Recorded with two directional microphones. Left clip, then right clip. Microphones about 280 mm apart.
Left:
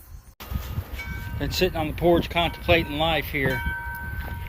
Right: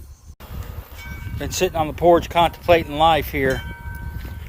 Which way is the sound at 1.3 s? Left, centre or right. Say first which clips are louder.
Right 4 dB; centre.